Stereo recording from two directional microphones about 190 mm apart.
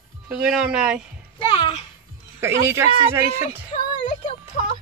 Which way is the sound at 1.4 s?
25° left (ahead or behind).